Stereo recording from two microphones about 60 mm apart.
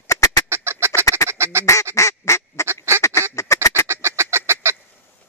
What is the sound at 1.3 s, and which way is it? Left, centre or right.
Quack, right.